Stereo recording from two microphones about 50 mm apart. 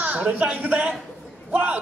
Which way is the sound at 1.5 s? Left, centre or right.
Right.